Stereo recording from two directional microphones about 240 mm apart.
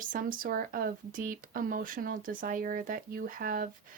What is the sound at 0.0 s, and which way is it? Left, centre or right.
Speech, right.